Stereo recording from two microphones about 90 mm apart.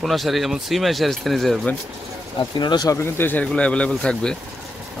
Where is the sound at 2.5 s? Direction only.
50° left (ahead or behind).